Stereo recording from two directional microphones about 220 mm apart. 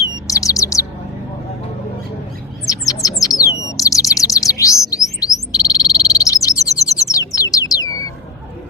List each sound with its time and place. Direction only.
0.3 s bird: 15° left (ahead or behind)
2.6 s bird: 15° left (ahead or behind)
5.5 s frog: 15° left (ahead or behind)